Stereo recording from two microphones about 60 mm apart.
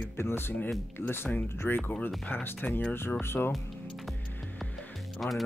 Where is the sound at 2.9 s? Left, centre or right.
Left.